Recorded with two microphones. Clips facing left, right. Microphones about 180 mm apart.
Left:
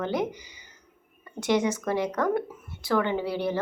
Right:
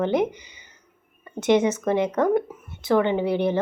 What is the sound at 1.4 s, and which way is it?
Speech, 20° right (ahead or behind).